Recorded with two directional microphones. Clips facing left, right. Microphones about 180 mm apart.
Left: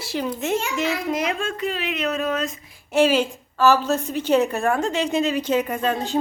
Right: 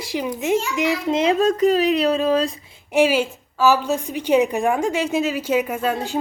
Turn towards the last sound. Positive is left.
turn(degrees=-10)  # may be behind; listen again after turning